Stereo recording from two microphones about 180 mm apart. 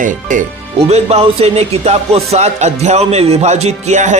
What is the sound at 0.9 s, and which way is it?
Speech, 35° right (ahead or behind).